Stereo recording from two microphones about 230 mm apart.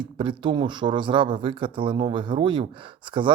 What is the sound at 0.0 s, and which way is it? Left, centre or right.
Speech, right.